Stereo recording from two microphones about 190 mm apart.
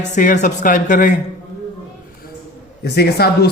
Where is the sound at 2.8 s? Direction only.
55° left (ahead or behind).